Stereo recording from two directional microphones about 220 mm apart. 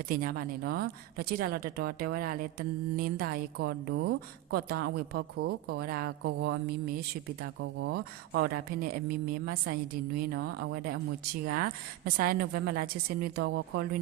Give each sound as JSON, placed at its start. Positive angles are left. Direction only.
{"t": 0.1, "sound": "speech", "side_deg": -40}
{"t": 7.6, "sound": "speech", "side_deg": -55}